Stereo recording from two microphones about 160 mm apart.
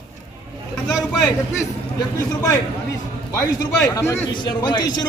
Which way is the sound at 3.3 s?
20° left (ahead or behind).